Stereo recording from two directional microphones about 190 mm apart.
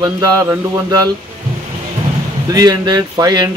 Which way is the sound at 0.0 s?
15° right (ahead or behind).